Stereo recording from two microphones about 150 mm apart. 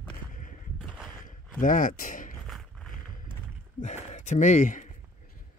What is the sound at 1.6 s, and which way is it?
Speech, 65° left (ahead or behind).